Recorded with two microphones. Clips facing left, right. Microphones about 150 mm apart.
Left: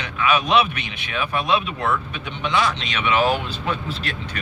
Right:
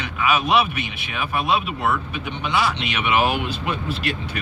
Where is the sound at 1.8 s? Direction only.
10° right (ahead or behind).